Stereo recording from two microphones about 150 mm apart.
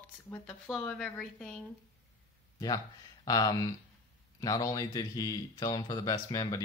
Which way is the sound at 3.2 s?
25° left (ahead or behind).